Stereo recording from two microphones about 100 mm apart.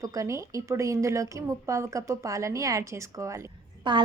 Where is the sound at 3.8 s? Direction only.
55° right (ahead or behind).